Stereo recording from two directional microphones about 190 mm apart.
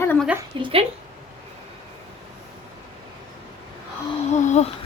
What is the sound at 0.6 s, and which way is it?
Speech, 30° right (ahead or behind).